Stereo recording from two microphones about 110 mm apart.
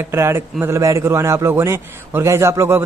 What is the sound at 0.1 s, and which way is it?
A man's voice, 25° right (ahead or behind).